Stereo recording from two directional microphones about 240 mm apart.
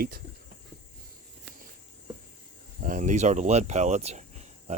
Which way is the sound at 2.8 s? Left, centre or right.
Right.